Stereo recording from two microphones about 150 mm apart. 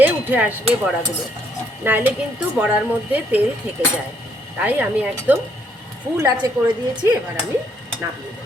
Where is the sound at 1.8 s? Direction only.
10° right (ahead or behind).